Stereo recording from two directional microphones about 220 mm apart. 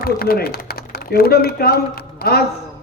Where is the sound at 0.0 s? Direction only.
45° left (ahead or behind).